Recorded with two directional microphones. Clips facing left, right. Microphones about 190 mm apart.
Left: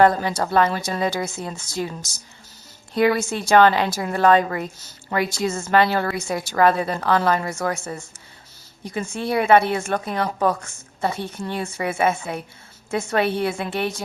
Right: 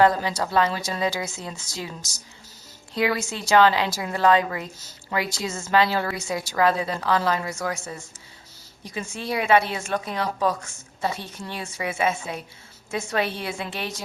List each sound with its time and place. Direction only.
0.0 s a woman's voice: 55° left (ahead or behind)